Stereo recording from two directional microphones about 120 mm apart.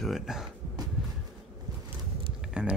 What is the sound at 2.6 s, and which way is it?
Music, 10° right (ahead or behind).